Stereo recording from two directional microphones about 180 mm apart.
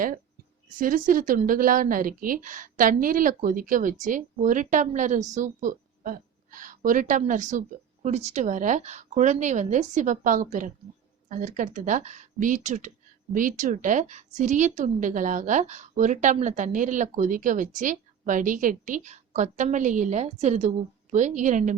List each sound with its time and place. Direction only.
0.8 s a woman's voice: 50° right (ahead or behind)